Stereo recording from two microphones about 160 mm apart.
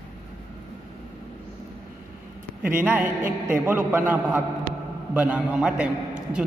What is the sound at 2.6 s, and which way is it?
A man's voice, 15° right (ahead or behind).